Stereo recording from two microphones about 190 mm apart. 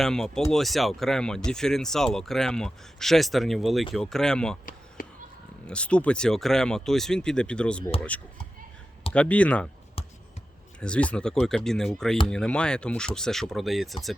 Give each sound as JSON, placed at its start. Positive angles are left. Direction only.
{"t": 0.0, "sound": "speech", "side_deg": 5}
{"t": 5.0, "sound": "a sound", "side_deg": 45}
{"t": 5.6, "sound": "speech", "side_deg": 5}
{"t": 9.1, "sound": "speech", "side_deg": 5}
{"t": 10.8, "sound": "speech", "side_deg": 5}